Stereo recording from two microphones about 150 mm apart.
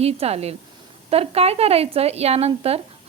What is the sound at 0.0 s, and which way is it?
A woman's voice, 45° right (ahead or behind).